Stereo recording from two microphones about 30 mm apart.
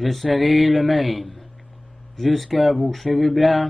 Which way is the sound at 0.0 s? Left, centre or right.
Centre.